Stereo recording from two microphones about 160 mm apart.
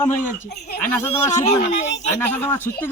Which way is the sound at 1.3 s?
45° left (ahead or behind).